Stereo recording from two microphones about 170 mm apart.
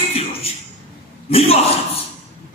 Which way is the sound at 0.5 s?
35° left (ahead or behind).